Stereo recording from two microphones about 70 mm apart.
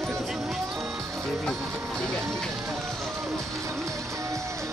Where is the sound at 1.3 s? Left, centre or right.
Centre.